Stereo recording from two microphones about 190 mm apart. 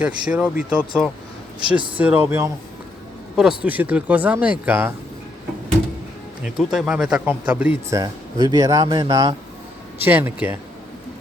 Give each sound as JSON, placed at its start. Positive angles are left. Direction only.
{"t": 0.0, "sound": "speech", "side_deg": -5}
{"t": 1.5, "sound": "speech", "side_deg": -25}
{"t": 2.0, "sound": "speech", "side_deg": -10}
{"t": 6.4, "sound": "speech", "side_deg": -5}